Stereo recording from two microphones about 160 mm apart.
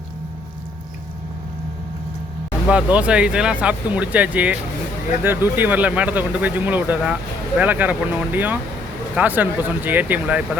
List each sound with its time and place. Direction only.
2.6 s speech: 5° right (ahead or behind)